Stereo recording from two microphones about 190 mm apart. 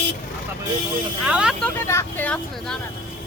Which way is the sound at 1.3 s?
5° right (ahead or behind).